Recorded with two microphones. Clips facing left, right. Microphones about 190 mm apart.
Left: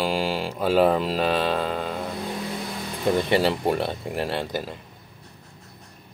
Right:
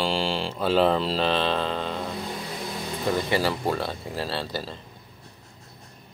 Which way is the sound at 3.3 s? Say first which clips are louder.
Left 3 dB; 25° left (ahead or behind).